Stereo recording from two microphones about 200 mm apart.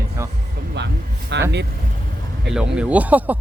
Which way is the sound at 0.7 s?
60° right (ahead or behind).